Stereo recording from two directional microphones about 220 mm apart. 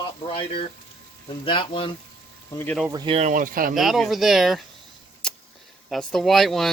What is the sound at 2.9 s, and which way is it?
Speech, 25° right (ahead or behind).